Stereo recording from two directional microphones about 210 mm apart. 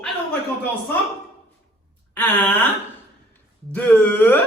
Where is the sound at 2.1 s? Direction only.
10° left (ahead or behind).